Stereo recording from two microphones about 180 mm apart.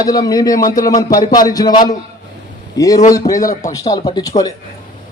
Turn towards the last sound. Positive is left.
turn(degrees=20)  # may be behind; listen again after turning